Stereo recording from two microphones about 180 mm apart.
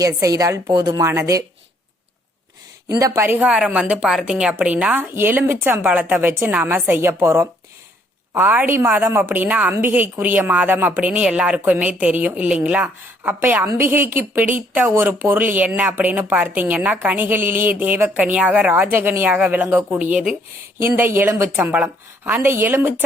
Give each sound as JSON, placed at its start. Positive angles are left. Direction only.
{"t": 0.0, "sound": "a woman's voice", "side_deg": -20}
{"t": 3.2, "sound": "a woman's voice", "side_deg": -10}